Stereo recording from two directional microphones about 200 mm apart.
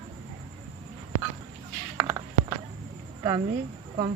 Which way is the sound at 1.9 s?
20° right (ahead or behind).